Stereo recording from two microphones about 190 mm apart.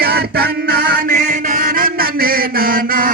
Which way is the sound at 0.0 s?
55° right (ahead or behind).